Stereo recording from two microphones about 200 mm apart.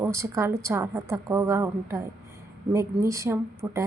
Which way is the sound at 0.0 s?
15° right (ahead or behind).